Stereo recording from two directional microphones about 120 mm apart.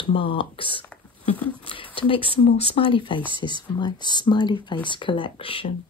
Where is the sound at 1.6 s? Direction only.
45° left (ahead or behind).